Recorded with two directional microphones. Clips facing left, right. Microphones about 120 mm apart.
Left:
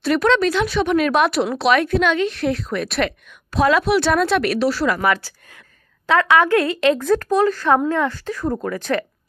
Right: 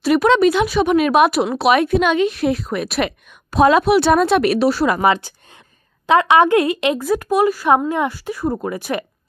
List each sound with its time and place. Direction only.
0.0 s speech: 10° right (ahead or behind)